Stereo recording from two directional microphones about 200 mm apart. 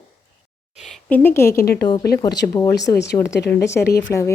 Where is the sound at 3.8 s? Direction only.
50° left (ahead or behind).